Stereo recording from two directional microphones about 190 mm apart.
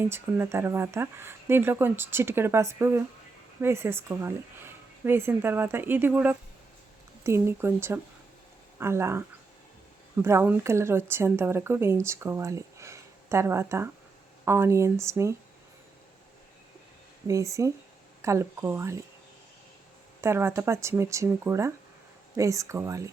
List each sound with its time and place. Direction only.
0.0 s speech: 10° right (ahead or behind)
10.2 s speech: 10° right (ahead or behind)
17.2 s speech: 15° right (ahead or behind)
20.2 s speech: 15° right (ahead or behind)